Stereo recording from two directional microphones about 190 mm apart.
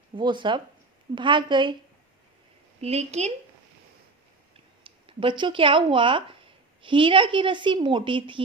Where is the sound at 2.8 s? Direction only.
35° right (ahead or behind).